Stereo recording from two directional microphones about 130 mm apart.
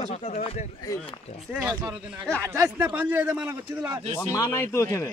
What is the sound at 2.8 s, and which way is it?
A man's voice, 15° right (ahead or behind).